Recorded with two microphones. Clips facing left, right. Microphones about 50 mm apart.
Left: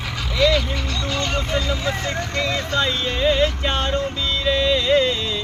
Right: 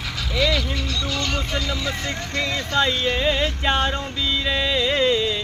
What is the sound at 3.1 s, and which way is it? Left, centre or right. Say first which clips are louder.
Music: left 3 dB; centre.